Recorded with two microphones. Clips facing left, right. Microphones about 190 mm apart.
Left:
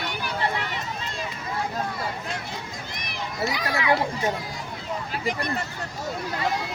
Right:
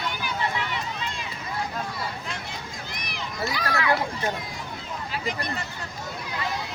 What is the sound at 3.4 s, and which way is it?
Children playing, 20° left (ahead or behind).